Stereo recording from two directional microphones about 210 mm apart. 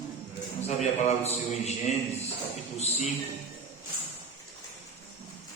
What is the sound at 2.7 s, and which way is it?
Speech, 30° left (ahead or behind).